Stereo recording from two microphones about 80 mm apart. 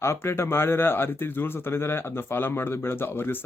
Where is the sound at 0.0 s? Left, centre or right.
Left.